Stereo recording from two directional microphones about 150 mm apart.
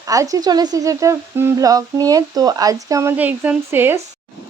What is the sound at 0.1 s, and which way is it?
Speech, 25° right (ahead or behind).